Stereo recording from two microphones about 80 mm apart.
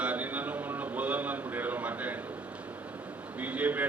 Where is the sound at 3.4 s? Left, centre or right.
Centre.